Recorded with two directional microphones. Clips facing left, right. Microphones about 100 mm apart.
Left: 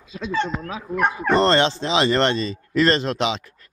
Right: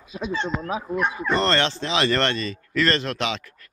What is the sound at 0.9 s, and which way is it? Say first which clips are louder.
Speech: left 5 dB; 50° left (ahead or behind).